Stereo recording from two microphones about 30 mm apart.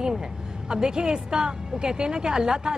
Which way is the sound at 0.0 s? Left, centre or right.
Right.